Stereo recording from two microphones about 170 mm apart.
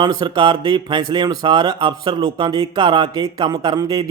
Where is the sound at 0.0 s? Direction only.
25° right (ahead or behind).